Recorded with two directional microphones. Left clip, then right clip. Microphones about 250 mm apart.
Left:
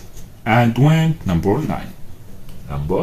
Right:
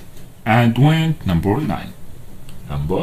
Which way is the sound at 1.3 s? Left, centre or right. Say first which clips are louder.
Left 1 dB; right.